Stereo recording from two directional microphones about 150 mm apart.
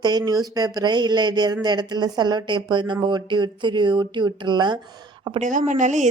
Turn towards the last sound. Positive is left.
turn(degrees=-55)  # may be behind; listen again after turning